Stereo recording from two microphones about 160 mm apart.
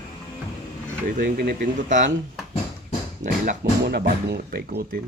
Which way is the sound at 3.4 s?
80° right.